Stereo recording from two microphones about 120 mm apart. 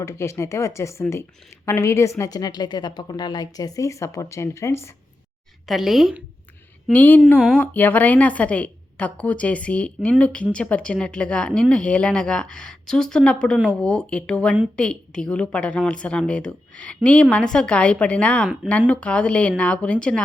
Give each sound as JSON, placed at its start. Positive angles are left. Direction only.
{"t": 0.0, "sound": "a woman's voice", "side_deg": 25}
{"t": 5.6, "sound": "a woman's voice", "side_deg": 0}
{"t": 6.9, "sound": "a woman's voice", "side_deg": 15}